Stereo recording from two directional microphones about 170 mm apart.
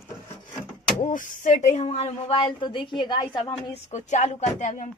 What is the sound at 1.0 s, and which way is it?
Speech, 50° left (ahead or behind).